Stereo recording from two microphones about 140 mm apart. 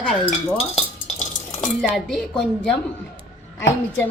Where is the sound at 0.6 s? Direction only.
45° left (ahead or behind).